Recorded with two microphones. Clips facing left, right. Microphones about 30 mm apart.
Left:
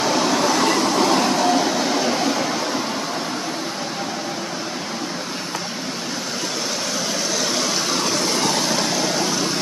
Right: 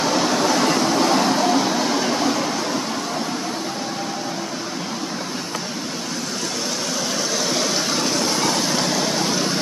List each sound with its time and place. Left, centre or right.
0.0 s vehicle: centre
7.3 s vehicle: centre